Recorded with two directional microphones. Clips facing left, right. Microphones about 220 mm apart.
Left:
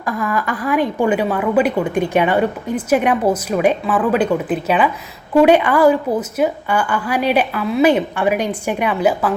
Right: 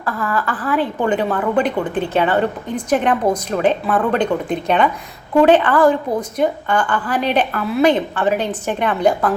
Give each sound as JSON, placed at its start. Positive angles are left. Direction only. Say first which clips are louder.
{"t": 0.0, "sound": "a woman's voice", "louder": "left 1 dB", "side_deg": 15}